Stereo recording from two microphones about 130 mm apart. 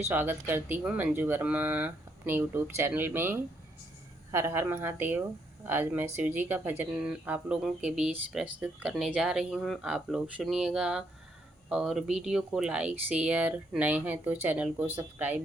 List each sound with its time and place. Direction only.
0.0 s speech: 15° right (ahead or behind)